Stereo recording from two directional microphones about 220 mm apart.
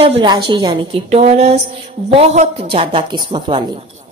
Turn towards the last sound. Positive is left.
turn(degrees=-25)  # may be behind; listen again after turning